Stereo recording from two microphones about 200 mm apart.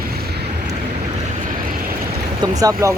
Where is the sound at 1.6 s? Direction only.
45° right (ahead or behind).